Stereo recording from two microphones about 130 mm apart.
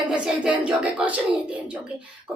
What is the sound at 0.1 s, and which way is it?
Speech, 5° right (ahead or behind).